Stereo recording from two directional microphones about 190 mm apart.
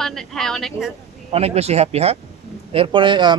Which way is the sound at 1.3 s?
35° right (ahead or behind).